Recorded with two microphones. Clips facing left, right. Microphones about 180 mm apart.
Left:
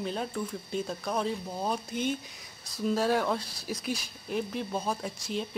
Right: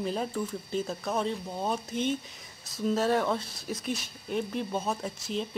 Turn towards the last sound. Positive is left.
turn(degrees=0)  # may be behind; listen again after turning